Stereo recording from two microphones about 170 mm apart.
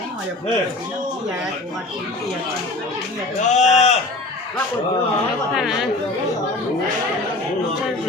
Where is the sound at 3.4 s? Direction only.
40° left (ahead or behind).